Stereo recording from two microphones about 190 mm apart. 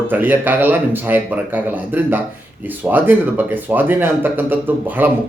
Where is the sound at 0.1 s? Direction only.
10° right (ahead or behind).